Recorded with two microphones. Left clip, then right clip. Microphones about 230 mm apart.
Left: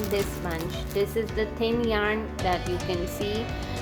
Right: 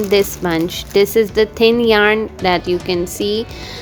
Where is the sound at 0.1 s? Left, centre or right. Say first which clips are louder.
Right 16 dB; right.